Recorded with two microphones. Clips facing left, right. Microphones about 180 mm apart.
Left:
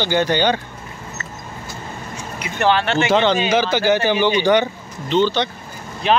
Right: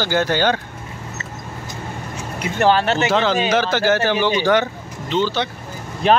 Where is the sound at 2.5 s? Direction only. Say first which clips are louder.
Right 1 dB; 40° right (ahead or behind).